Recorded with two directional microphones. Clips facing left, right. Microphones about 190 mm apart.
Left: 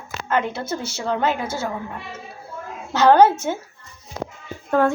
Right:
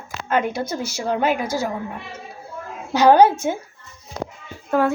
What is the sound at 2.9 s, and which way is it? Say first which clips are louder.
Speech: right 1 dB; 15° right (ahead or behind).